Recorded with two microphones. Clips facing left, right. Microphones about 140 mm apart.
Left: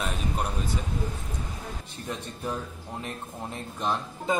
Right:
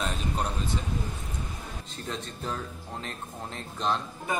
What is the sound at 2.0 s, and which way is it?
Speech, 10° left (ahead or behind).